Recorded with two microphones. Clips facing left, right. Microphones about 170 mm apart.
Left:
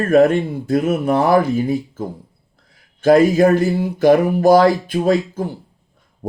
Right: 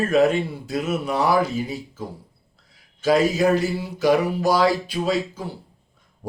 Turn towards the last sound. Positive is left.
turn(degrees=50)  # may be behind; listen again after turning